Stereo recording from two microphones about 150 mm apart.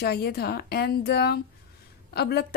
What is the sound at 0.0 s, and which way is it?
A woman's voice, 90° left.